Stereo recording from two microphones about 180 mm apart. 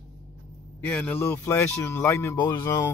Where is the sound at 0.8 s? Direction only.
10° left (ahead or behind).